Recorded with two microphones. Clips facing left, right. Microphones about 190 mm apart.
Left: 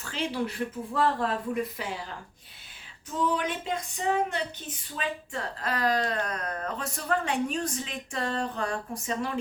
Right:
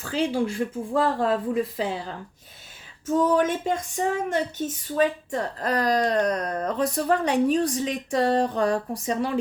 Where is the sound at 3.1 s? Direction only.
45° right (ahead or behind).